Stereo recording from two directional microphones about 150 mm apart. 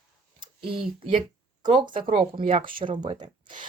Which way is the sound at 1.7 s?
35° right (ahead or behind).